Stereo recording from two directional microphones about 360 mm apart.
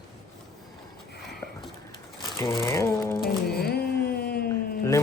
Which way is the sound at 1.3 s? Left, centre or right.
Centre.